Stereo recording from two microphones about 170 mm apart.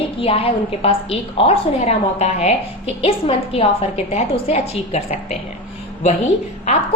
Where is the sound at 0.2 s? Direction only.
35° left (ahead or behind).